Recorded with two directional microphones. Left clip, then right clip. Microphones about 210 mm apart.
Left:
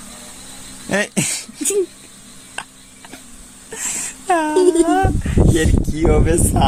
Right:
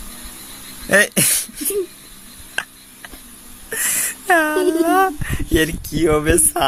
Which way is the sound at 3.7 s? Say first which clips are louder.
Right 4 dB; 10° right (ahead or behind).